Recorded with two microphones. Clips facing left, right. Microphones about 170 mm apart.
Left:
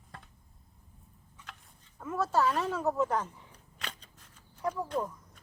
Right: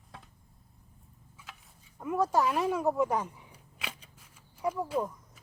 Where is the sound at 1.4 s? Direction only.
5° right (ahead or behind).